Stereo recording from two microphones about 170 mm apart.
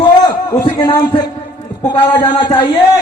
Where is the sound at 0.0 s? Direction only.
25° left (ahead or behind).